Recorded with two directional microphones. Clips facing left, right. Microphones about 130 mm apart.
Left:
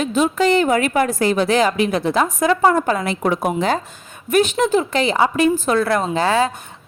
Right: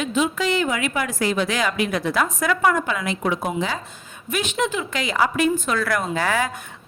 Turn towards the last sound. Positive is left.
turn(degrees=25)  # may be behind; listen again after turning